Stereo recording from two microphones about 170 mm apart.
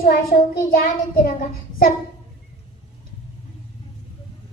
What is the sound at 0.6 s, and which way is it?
Child singing, 55° left (ahead or behind).